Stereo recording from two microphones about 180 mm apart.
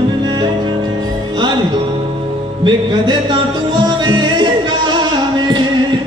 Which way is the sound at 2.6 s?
25° right (ahead or behind).